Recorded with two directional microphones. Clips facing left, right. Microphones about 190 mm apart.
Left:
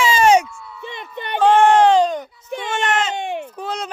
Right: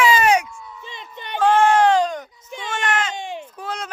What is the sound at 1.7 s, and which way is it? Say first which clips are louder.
Speech: left 3 dB; 25° left (ahead or behind).